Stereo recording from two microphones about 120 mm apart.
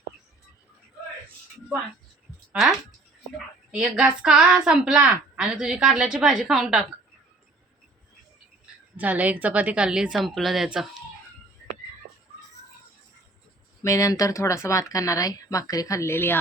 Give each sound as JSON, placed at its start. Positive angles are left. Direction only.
{"t": 2.5, "sound": "a woman's voice", "side_deg": 0}
{"t": 9.0, "sound": "a woman's voice", "side_deg": -15}
{"t": 13.8, "sound": "speech", "side_deg": 30}